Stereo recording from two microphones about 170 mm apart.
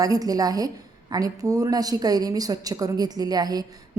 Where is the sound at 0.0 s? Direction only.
20° right (ahead or behind).